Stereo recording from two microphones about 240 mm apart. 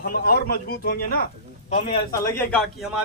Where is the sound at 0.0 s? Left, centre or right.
Left.